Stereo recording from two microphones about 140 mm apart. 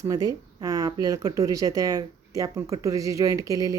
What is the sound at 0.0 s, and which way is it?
Speech, 25° right (ahead or behind).